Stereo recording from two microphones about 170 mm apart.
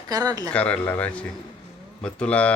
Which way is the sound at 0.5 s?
10° left (ahead or behind).